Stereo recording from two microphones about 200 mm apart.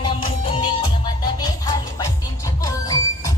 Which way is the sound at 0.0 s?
25° left (ahead or behind).